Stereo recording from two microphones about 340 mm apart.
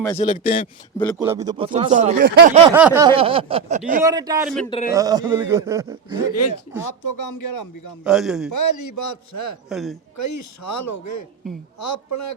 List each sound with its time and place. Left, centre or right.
0.2 s a man's voice: left
1.2 s speech: centre; by 2.6 s right
2.6 s speech: centre; by 4.0 s right
4.0 s speech: centre
4.4 s a man's voice: centre
4.9 s speech: centre
6.2 s a man's voice: left
6.8 s speech: left
8.0 s a man's voice: centre
8.5 s speech: left
9.6 s a man's voice: centre
10.2 s a man's voice: left